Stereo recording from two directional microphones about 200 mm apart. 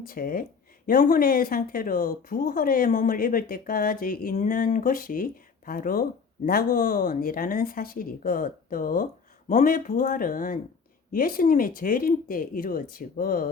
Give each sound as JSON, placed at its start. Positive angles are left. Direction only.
{"t": 0.0, "sound": "speech", "side_deg": 45}